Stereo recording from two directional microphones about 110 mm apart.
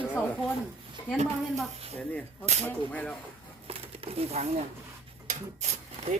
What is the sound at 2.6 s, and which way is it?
Speech, 15° left (ahead or behind).